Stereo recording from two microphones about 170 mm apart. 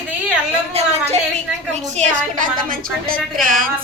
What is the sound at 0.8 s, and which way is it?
Speech, 35° right (ahead or behind).